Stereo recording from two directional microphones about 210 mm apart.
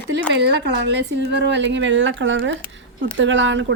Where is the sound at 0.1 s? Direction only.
55° right (ahead or behind).